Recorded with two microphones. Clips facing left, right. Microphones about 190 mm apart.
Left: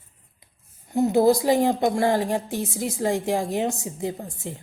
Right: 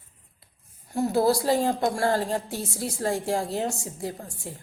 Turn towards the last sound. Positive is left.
turn(degrees=20)  # may be behind; listen again after turning